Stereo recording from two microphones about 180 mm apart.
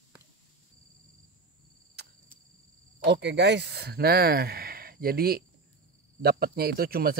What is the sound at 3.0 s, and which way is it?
Speech, 75° right (ahead or behind).